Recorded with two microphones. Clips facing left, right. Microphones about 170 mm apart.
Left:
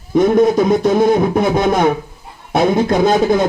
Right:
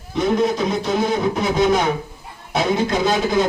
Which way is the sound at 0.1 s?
50° left (ahead or behind).